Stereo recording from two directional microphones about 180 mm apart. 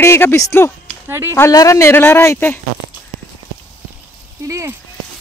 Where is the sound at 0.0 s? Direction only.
15° left (ahead or behind).